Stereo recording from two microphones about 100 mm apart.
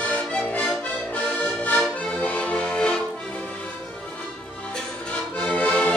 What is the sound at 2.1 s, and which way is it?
Music, 15° left (ahead or behind).